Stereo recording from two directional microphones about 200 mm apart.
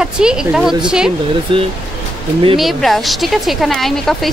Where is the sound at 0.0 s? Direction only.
5° right (ahead or behind).